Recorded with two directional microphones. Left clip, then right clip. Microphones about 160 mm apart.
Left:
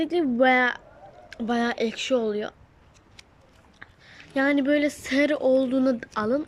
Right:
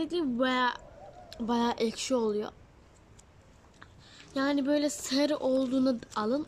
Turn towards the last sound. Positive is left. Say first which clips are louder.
# left 5 dB
turn(degrees=-25)  # may be behind; listen again after turning